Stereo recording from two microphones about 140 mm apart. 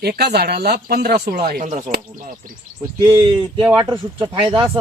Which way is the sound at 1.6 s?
55° right (ahead or behind).